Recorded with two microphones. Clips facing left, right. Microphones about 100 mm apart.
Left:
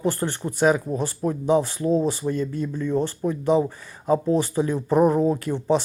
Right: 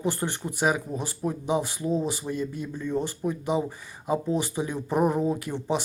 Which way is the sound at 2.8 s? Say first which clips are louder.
Left 4 dB; 55° left (ahead or behind).